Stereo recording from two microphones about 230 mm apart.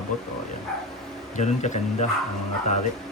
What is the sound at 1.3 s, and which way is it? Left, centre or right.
Speech, left.